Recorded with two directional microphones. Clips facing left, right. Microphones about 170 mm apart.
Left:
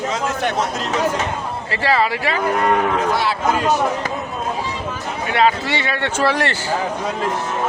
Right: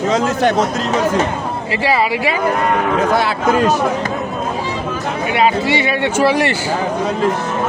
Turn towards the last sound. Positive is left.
turn(degrees=-10)  # may be behind; listen again after turning